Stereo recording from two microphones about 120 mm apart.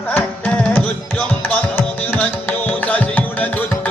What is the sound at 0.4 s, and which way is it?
Tabla, 15° left (ahead or behind).